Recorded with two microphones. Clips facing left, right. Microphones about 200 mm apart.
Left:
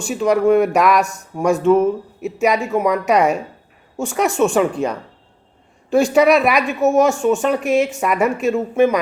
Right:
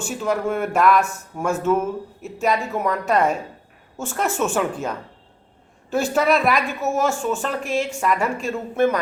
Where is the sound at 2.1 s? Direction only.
70° left (ahead or behind).